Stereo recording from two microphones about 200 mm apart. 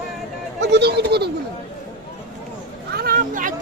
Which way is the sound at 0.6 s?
60° right (ahead or behind).